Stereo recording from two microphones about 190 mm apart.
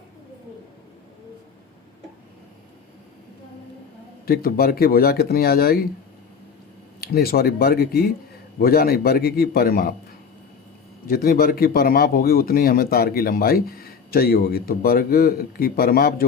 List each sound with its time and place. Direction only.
4.3 s speech: 50° left (ahead or behind)
7.0 s speech: 55° left (ahead or behind)
11.0 s speech: 50° left (ahead or behind)